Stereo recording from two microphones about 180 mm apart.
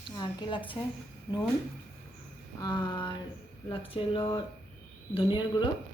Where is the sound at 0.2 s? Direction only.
25° left (ahead or behind).